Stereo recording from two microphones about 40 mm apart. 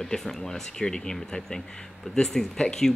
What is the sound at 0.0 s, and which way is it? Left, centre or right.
Speech, centre.